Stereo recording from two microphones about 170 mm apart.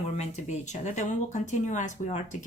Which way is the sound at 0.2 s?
45° left (ahead or behind).